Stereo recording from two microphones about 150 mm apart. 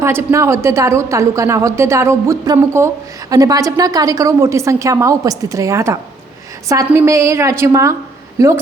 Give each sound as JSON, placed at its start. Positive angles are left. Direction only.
{"t": 0.0, "sound": "a woman's voice", "side_deg": -15}